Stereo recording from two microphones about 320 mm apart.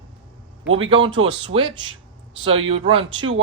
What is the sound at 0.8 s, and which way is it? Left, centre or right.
Speech, centre.